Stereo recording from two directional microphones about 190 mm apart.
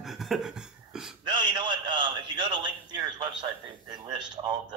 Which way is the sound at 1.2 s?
25° right (ahead or behind).